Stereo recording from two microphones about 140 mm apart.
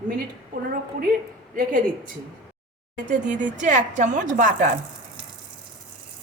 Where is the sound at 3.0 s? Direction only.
60° right (ahead or behind).